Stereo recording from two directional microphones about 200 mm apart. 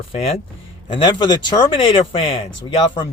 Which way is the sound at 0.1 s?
30° left (ahead or behind).